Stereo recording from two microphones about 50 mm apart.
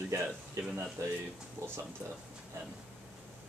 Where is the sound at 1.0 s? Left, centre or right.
Right.